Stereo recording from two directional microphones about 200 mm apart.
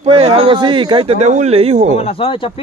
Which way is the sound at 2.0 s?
30° left (ahead or behind).